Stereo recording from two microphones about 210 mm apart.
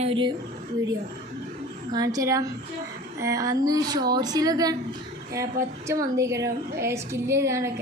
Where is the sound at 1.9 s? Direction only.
15° right (ahead or behind).